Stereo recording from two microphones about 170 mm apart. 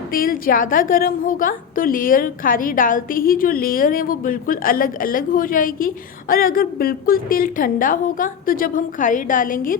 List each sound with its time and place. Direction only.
0.1 s a woman's voice: 60° left (ahead or behind)